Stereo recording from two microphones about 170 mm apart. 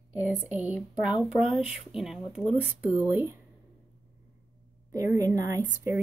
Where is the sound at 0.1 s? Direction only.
5° right (ahead or behind).